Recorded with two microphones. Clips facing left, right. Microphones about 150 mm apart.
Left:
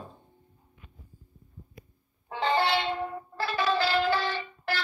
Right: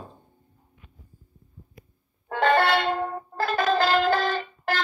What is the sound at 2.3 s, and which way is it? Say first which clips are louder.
Music: right 5 dB; 60° right (ahead or behind).